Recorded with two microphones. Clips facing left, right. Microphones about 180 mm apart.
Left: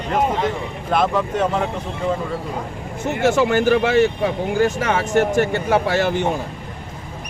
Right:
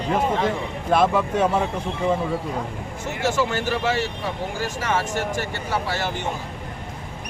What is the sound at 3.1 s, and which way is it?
Speech, 60° left (ahead or behind).